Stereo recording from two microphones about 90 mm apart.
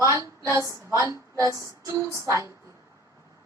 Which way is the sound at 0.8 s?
35° right (ahead or behind).